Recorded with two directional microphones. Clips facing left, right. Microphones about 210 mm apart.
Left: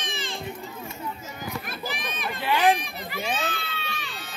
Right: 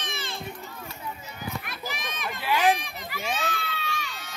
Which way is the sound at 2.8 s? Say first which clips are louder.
Left 2 dB; 35° left (ahead or behind).